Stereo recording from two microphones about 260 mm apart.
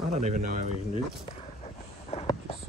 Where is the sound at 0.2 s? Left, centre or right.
Right.